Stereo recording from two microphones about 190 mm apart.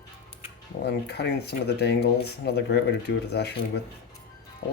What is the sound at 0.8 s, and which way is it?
Speech, 60° left (ahead or behind).